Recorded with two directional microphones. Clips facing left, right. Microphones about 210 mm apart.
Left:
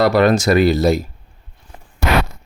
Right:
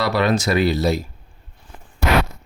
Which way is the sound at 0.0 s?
50° left (ahead or behind).